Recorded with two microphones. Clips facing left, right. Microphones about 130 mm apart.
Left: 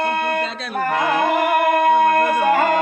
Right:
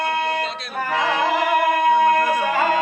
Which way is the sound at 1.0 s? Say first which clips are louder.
Left 1 dB; 50° left (ahead or behind).